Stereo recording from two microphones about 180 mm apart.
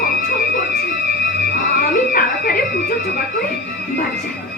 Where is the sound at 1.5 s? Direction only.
55° left (ahead or behind).